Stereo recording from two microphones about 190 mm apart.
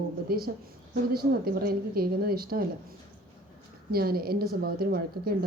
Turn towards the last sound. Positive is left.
turn(degrees=-55)  # may be behind; listen again after turning